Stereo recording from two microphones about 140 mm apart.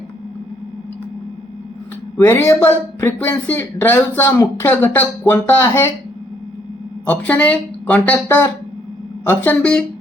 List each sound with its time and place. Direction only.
2.1 s speech: 15° left (ahead or behind)
7.0 s speech: 10° left (ahead or behind)